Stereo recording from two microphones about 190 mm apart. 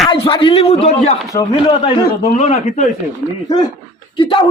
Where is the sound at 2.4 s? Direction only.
40° left (ahead or behind).